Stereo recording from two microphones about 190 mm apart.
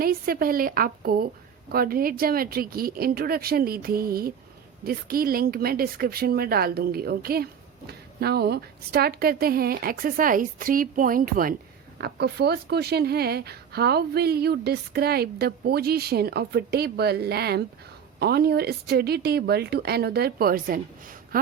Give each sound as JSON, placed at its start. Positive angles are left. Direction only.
{"t": 0.0, "sound": "a woman's voice", "side_deg": -50}
{"t": 11.9, "sound": "speech", "side_deg": -60}